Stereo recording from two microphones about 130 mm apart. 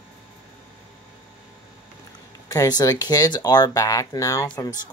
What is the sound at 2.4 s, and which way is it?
Speech, 30° left (ahead or behind).